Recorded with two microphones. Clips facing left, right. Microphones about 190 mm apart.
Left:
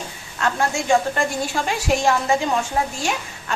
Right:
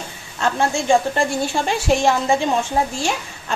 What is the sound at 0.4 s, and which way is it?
A woman's voice, 25° right (ahead or behind).